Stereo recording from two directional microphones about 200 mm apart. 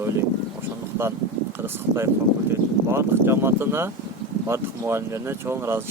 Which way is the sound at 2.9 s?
10° right (ahead or behind).